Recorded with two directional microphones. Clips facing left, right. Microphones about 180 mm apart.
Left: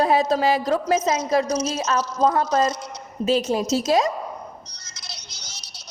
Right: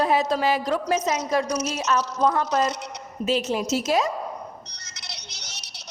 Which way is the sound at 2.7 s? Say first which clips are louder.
Left 1 dB; 70° right (ahead or behind).